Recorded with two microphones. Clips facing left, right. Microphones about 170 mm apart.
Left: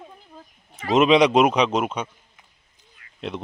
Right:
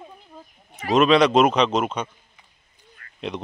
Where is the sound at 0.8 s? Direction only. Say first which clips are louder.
Even; 20° left (ahead or behind).